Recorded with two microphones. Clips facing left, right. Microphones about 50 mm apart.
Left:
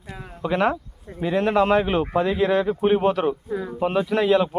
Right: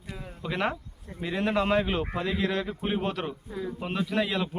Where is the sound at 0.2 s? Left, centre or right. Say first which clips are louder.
Left 9 dB; left.